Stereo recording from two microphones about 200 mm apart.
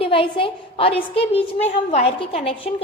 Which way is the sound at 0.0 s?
25° left (ahead or behind).